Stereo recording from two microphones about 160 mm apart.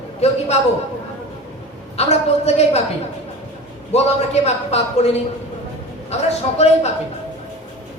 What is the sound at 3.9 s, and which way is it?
A man's voice, 40° left (ahead or behind).